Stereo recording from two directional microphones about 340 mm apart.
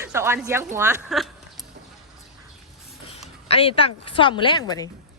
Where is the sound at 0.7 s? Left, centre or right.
Centre.